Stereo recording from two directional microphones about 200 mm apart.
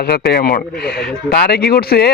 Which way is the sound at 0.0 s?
50° left (ahead or behind).